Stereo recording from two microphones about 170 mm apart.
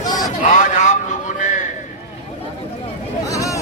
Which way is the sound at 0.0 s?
20° left (ahead or behind).